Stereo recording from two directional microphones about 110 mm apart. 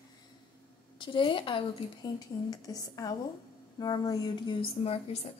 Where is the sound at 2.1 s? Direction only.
35° left (ahead or behind).